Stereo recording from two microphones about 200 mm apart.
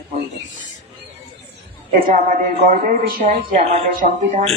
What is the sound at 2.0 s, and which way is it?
Speech, 40° right (ahead or behind).